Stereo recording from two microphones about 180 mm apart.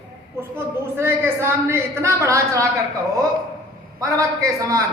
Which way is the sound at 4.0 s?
20° right (ahead or behind).